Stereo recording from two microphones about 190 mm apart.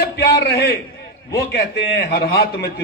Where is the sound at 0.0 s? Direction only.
60° left (ahead or behind).